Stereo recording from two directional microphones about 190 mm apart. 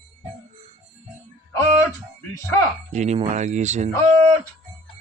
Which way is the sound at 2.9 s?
35° right (ahead or behind).